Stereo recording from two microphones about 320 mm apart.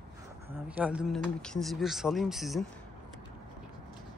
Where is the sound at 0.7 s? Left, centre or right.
Centre.